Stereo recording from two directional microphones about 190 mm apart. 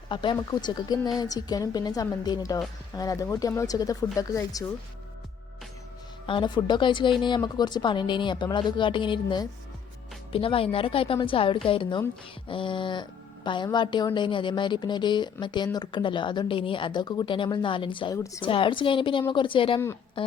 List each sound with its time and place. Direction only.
0.1 s speech: 25° left (ahead or behind)
6.2 s speech: 25° left (ahead or behind)